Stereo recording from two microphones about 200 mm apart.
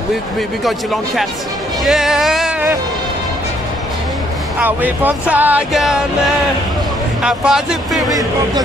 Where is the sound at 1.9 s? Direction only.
Centre (ahead or behind).